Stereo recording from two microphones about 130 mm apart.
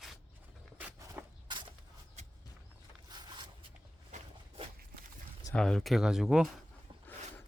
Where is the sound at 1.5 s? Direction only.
40° right (ahead or behind).